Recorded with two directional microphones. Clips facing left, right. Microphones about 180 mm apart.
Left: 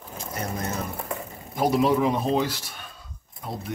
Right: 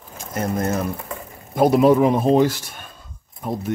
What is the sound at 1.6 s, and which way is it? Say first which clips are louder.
A man's voice: right 7 dB; 50° right (ahead or behind).